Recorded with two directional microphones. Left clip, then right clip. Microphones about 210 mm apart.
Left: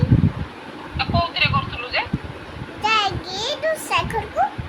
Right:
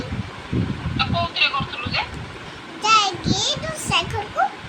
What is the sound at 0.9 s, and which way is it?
Speech, 15° left (ahead or behind).